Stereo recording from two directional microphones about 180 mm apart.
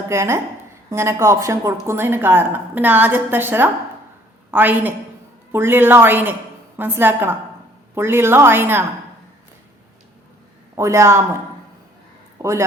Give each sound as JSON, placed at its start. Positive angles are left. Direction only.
{"t": 0.1, "sound": "speech", "side_deg": -15}
{"t": 10.8, "sound": "speech", "side_deg": -15}
{"t": 12.4, "sound": "speech", "side_deg": -15}